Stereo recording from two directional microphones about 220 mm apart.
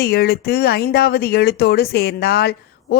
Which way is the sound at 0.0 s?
45° left (ahead or behind).